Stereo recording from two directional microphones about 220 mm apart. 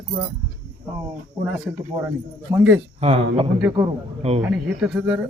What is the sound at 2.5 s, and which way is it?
Speech, 15° right (ahead or behind).